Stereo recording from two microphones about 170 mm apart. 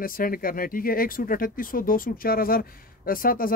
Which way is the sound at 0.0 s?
55° left (ahead or behind).